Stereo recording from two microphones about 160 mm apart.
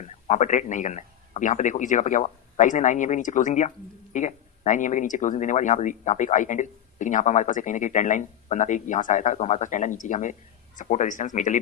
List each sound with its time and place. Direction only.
0.0 s speech: 50° left (ahead or behind)